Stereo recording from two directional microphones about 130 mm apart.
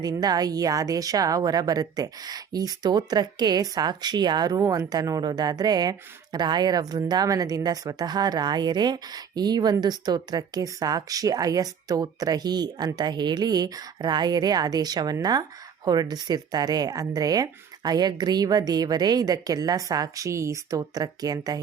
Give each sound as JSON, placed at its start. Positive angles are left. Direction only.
{"t": 0.0, "sound": "speech", "side_deg": -30}